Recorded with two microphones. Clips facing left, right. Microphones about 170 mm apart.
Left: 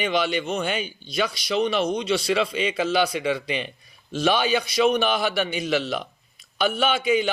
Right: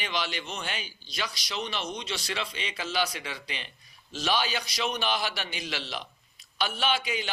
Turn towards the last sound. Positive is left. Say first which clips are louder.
# left 8 dB
turn(degrees=55)  # may be behind; listen again after turning